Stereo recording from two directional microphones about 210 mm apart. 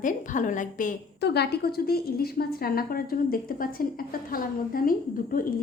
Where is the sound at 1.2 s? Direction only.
50° left (ahead or behind).